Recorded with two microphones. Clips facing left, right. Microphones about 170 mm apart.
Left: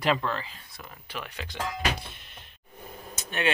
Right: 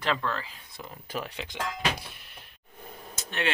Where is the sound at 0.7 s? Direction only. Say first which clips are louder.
Right 5 dB; 20° right (ahead or behind).